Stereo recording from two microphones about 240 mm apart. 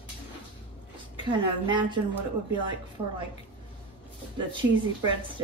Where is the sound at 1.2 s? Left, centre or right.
Centre.